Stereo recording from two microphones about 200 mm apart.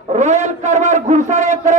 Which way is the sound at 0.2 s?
35° right (ahead or behind).